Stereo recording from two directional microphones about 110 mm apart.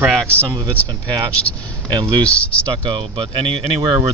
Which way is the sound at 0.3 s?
20° right (ahead or behind).